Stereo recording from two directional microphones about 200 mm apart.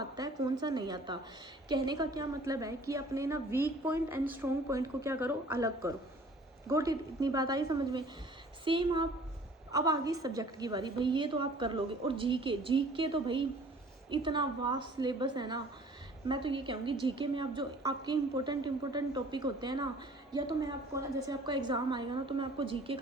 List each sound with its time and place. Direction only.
0.2 s a woman's voice: 20° right (ahead or behind)